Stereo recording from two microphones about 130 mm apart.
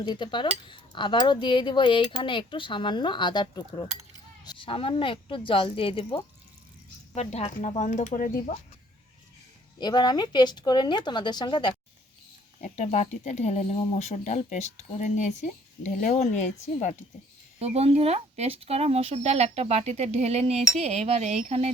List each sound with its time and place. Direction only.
0.0 s cutlery: 35° left (ahead or behind)
7.2 s speech: 55° left (ahead or behind); by 8.5 s 80° left
9.8 s cutlery: 35° left (ahead or behind)
12.5 s speech: 70° left (ahead or behind)
17.6 s speech: 55° right (ahead or behind)